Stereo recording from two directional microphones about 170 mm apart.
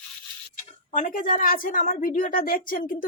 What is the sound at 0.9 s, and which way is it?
A woman's voice, 50° left (ahead or behind).